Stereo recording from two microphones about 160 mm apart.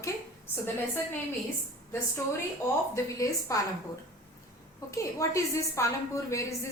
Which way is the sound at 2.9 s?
20° left (ahead or behind).